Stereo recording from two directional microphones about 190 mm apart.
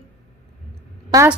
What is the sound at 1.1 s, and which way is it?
Speech, 20° right (ahead or behind).